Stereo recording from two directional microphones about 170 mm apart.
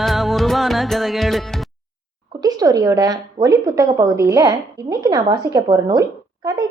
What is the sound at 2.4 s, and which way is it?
A woman's voice, 20° right (ahead or behind).